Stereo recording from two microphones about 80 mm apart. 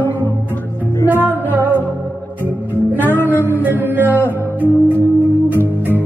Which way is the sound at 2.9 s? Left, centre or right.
Right.